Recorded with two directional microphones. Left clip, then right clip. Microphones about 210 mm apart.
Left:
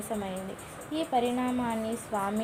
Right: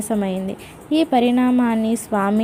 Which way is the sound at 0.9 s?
35° right (ahead or behind).